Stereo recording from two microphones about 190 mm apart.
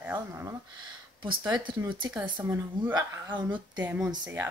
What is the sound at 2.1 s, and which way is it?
Speech, 10° right (ahead or behind).